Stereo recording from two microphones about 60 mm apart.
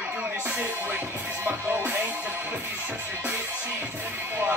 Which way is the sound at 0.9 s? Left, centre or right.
Right.